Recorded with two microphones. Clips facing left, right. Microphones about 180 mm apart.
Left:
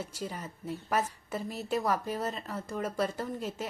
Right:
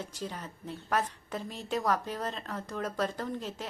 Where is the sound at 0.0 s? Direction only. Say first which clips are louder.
Left 1 dB; 10° left (ahead or behind).